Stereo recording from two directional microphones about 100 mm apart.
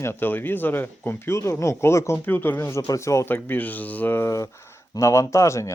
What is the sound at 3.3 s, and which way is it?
Speech, 15° left (ahead or behind).